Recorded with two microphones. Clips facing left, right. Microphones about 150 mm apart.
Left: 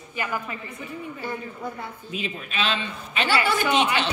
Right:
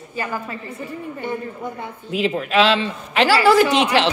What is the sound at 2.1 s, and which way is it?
A man's voice, 75° right (ahead or behind).